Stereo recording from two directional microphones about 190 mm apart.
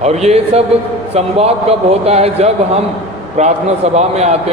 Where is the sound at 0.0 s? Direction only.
35° right (ahead or behind).